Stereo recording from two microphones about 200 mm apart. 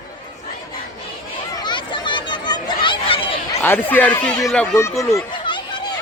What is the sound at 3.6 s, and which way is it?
Speech, 10° left (ahead or behind).